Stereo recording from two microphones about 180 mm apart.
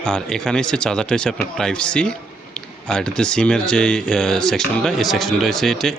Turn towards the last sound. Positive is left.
turn(degrees=0)  # may be behind; listen again after turning